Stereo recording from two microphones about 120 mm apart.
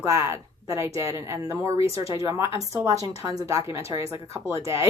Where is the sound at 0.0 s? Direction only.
25° right (ahead or behind).